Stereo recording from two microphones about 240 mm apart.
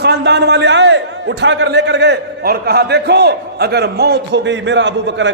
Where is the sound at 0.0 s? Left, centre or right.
Right.